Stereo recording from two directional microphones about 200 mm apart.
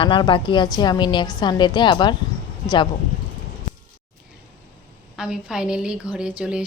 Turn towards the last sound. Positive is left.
turn(degrees=-5)  # may be behind; listen again after turning